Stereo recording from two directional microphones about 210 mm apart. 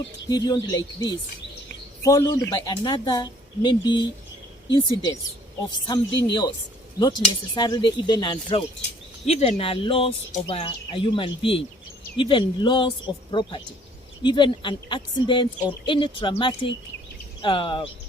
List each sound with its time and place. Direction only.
0.3 s speech: 20° left (ahead or behind)
7.5 s speech: 20° left (ahead or behind)